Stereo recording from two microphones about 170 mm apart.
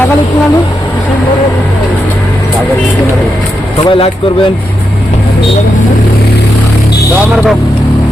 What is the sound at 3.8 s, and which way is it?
Speech, 30° left (ahead or behind).